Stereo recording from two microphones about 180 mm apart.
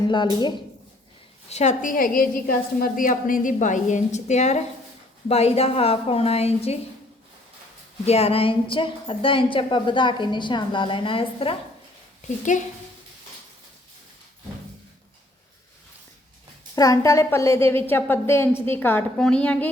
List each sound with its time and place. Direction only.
0.1 s a woman's voice: 25° left (ahead or behind)
1.5 s a woman's voice: 40° left (ahead or behind)
8.0 s a woman's voice: 35° left (ahead or behind)
12.5 s a woman's voice: 45° left (ahead or behind)
16.7 s a woman's voice: 20° left (ahead or behind)